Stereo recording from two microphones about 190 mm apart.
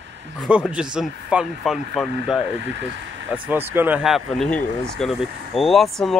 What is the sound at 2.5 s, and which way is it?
Speech, 70° right (ahead or behind).